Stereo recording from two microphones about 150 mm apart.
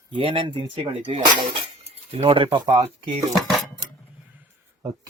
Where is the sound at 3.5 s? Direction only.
Centre (ahead or behind).